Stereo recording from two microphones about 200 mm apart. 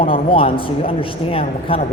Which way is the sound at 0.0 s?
25° left (ahead or behind).